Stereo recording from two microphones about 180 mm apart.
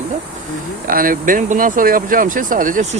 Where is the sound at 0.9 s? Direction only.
50° right (ahead or behind).